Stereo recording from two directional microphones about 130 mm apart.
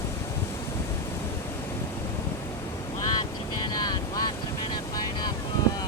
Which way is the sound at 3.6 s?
30° left (ahead or behind).